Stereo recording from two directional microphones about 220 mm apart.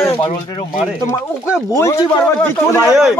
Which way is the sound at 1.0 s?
15° left (ahead or behind).